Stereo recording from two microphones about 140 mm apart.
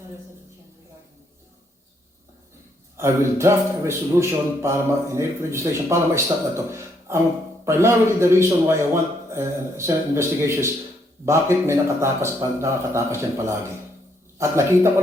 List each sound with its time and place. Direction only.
3.0 s a man's voice: 20° right (ahead or behind)